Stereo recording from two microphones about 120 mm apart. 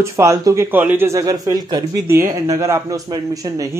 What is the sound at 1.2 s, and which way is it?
Speech, 30° right (ahead or behind).